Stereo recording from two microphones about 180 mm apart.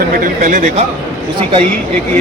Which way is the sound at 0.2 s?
45° right (ahead or behind).